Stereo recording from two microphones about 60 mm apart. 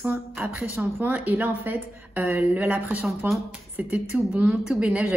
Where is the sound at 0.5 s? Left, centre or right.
Right.